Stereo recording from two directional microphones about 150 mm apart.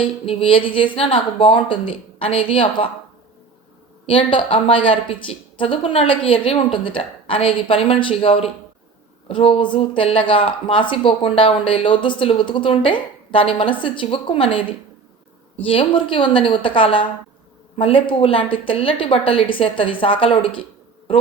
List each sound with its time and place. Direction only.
0.0 s speech: 35° left (ahead or behind)
4.0 s speech: 35° left (ahead or behind)
15.6 s speech: 35° left (ahead or behind)